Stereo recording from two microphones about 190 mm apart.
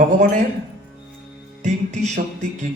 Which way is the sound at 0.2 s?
40° right (ahead or behind).